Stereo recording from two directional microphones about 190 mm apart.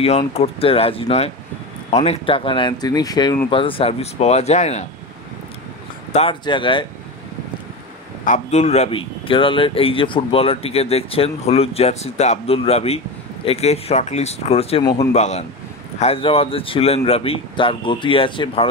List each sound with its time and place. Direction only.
0.0 s speech: 30° left (ahead or behind)
6.1 s speech: 25° left (ahead or behind)
8.3 s speech: 40° left (ahead or behind)